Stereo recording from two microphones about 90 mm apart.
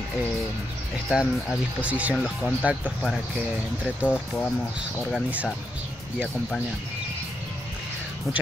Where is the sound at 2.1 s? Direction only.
Centre (ahead or behind).